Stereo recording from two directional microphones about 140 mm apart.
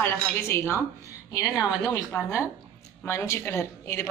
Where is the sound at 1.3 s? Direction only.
25° left (ahead or behind).